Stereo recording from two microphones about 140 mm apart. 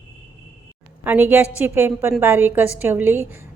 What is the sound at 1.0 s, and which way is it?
A woman's voice, 15° right (ahead or behind).